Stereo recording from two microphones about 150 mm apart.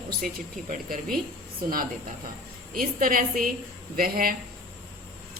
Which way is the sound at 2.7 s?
65° right (ahead or behind).